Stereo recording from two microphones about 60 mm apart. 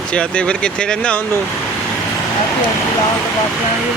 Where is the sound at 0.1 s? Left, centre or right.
Centre.